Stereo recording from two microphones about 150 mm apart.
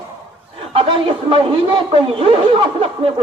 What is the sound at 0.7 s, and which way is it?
A man's voice, 35° right (ahead or behind).